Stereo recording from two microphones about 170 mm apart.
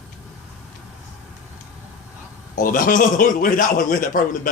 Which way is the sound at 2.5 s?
50° left (ahead or behind).